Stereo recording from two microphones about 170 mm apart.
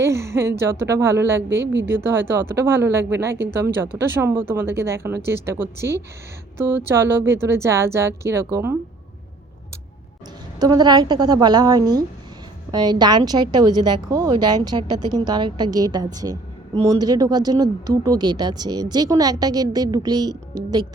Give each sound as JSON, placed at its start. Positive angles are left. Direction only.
{"t": 0.0, "sound": "speech", "side_deg": -15}
{"t": 10.6, "sound": "speech", "side_deg": -25}